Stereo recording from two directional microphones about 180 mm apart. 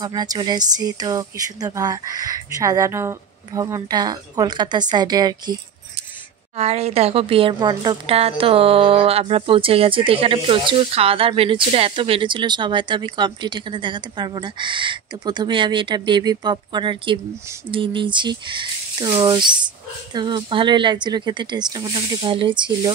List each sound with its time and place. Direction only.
0.0 s a woman's voice: 20° right (ahead or behind)
6.5 s a woman's voice: 35° right (ahead or behind)